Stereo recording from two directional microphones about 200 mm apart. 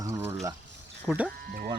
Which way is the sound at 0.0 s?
15° right (ahead or behind).